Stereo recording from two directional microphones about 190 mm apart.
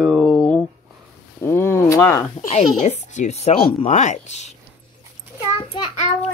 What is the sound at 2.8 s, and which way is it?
Speech, 35° left (ahead or behind).